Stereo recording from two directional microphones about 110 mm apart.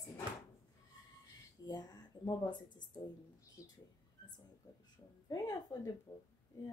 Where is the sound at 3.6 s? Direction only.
30° left (ahead or behind).